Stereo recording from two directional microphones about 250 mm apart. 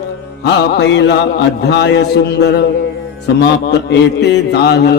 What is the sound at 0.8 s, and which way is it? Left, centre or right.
Mantra, left.